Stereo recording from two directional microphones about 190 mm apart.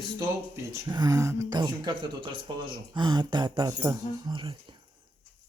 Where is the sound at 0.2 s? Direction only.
15° right (ahead or behind).